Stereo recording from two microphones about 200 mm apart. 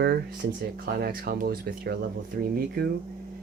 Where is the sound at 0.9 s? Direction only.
50° right (ahead or behind).